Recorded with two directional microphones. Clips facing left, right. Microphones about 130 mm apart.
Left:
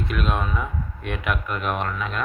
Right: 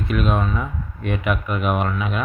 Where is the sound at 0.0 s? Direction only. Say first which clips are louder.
Right 4 dB; centre (ahead or behind).